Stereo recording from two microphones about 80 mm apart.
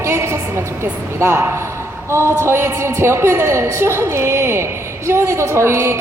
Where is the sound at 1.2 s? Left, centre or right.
Right.